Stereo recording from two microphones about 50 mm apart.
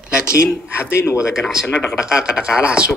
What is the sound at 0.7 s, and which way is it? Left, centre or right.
Speech, left.